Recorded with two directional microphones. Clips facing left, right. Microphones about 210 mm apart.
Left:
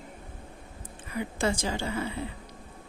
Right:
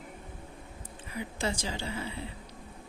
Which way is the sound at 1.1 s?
50° left (ahead or behind).